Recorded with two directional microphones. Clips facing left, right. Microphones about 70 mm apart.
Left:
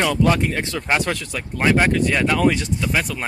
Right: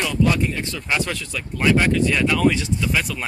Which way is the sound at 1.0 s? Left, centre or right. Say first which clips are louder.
Left 2 dB; left.